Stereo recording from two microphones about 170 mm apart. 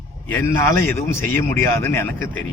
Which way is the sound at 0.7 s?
15° left (ahead or behind).